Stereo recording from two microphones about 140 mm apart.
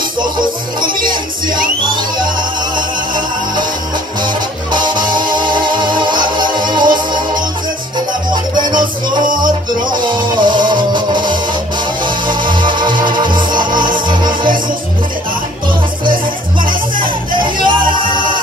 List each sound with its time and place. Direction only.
1.0 s music: 30° right (ahead or behind)
2.7 s music: 35° right (ahead or behind)
9.2 s music: 75° right (ahead or behind)
9.8 s music: 35° right (ahead or behind)
17.4 s music: 35° right (ahead or behind)